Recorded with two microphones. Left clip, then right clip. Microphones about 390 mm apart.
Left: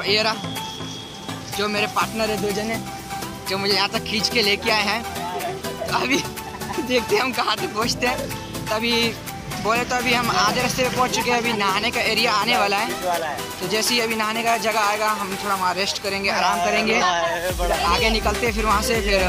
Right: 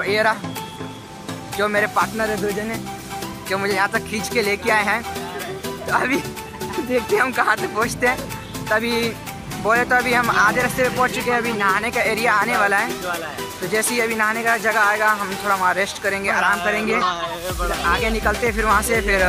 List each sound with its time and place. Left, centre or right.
0.0 s speech: centre
1.6 s speech: centre
3.4 s speech: centre
17.0 s music: centre
17.8 s speech: centre